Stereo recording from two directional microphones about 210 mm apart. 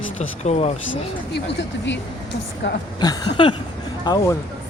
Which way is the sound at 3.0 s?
20° left (ahead or behind).